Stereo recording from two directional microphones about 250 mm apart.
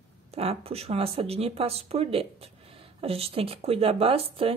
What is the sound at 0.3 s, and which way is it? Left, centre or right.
Speech, right.